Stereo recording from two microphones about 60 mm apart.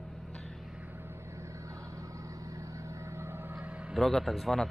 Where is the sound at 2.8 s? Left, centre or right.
Right.